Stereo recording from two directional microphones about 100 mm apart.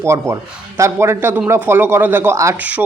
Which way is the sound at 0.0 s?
30° right (ahead or behind).